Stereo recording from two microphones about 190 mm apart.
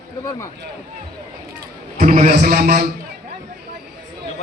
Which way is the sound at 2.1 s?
35° right (ahead or behind).